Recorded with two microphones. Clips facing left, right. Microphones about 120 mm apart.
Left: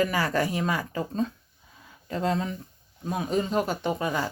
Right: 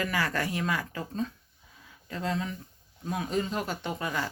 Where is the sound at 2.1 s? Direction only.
35° left (ahead or behind).